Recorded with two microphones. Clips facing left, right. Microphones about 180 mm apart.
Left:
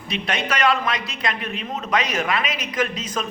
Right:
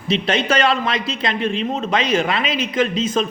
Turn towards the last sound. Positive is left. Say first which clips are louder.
# right 6 dB
turn(degrees=-25)  # may be behind; listen again after turning